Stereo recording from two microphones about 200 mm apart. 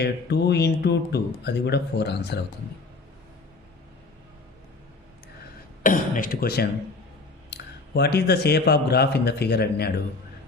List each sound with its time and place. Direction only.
0.0 s speech: 55° left (ahead or behind)
5.8 s speech: 45° left (ahead or behind)